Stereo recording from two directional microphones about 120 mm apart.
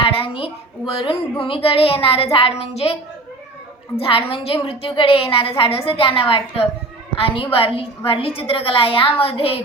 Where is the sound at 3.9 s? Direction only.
50° left (ahead or behind).